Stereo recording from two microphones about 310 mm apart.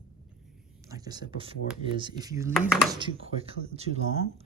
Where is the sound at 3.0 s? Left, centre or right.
Centre.